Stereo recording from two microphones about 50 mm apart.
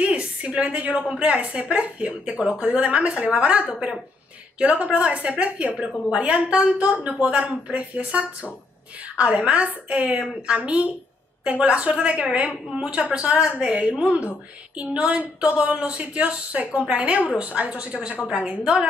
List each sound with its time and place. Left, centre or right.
0.0 s a woman's voice: right
5.8 s a woman's voice: centre